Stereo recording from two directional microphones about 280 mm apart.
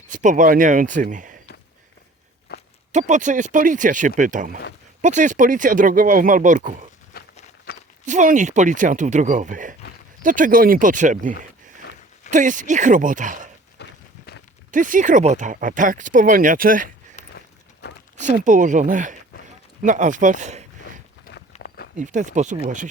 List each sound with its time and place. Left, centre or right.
0.1 s speech: right
2.5 s walk: left
2.9 s speech: right
7.1 s a sound: left
8.0 s speech: right
13.8 s a sound: left
14.7 s speech: right
17.2 s walk: left
18.2 s speech: right
20.8 s a sound: left
21.9 s speech: right